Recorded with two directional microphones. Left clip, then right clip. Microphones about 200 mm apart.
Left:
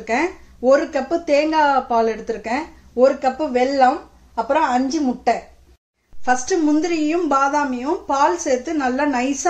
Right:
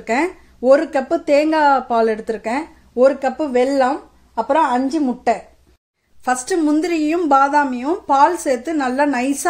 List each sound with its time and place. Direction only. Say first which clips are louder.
0.0 s a woman's voice: right 1 dB; 50° right (ahead or behind)